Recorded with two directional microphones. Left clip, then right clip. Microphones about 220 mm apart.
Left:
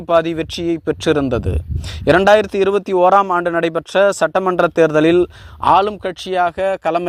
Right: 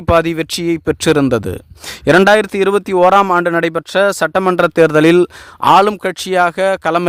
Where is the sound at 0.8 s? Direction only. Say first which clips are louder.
Right 4 dB; 25° right (ahead or behind).